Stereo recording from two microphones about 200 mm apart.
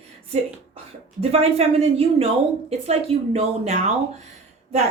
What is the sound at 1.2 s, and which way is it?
A woman's voice, 30° right (ahead or behind).